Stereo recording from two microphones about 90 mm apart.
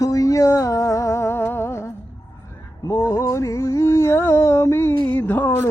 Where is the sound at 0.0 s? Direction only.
40° left (ahead or behind).